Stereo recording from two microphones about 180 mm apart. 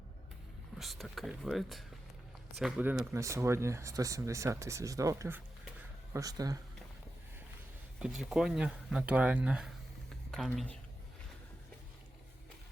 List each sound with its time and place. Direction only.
0.8 s speech: centre (ahead or behind)
3.1 s speech: 15° right (ahead or behind)
8.0 s speech: 5° right (ahead or behind)